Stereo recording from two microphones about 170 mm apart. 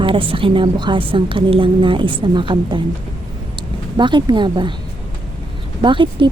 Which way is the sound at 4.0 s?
25° right (ahead or behind).